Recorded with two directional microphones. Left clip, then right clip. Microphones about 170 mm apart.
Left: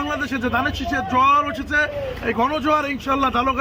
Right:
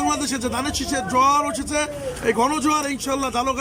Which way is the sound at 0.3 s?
35° right (ahead or behind).